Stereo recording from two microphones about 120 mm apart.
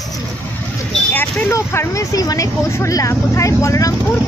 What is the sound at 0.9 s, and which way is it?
Vehicle, 5° left (ahead or behind).